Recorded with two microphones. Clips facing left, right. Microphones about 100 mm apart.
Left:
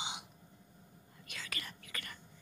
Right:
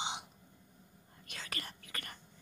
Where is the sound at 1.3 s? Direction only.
40° right (ahead or behind).